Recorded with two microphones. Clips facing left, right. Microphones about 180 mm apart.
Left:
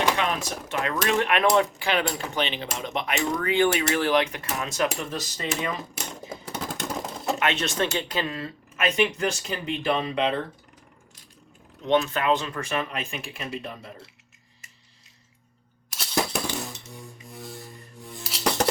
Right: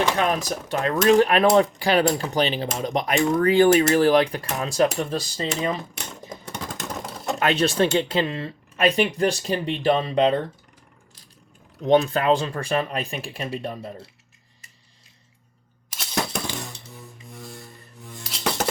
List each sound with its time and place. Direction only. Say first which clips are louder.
0.2 s speech: right 4 dB; 40° right (ahead or behind)
5.9 s typewriter: left 1 dB; 5° left (ahead or behind)
7.3 s speech: right 7 dB; 35° right (ahead or behind)
11.9 s speech: right 4 dB; 35° right (ahead or behind)
16.0 s music: left 1 dB; centre (ahead or behind)